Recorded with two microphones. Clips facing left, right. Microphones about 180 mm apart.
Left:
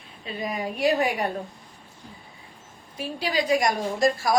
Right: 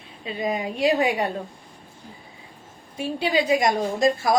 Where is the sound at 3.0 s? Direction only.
25° right (ahead or behind).